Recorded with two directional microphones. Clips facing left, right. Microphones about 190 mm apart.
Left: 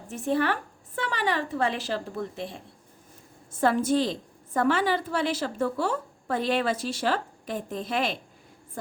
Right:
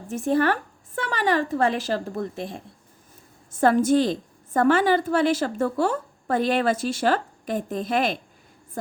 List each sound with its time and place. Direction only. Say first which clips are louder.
0.1 s a woman's voice: right 4 dB; 45° right (ahead or behind)
3.6 s a woman's voice: right 5 dB; 45° right (ahead or behind)